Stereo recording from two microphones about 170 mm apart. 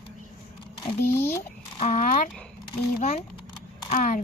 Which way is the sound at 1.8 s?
55° left (ahead or behind).